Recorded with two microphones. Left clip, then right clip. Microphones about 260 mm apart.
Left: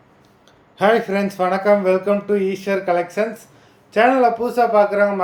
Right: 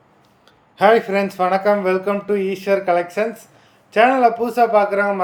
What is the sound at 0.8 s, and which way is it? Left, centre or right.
Speech, centre.